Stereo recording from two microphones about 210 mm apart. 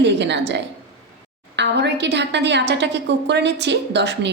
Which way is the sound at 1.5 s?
55° right (ahead or behind).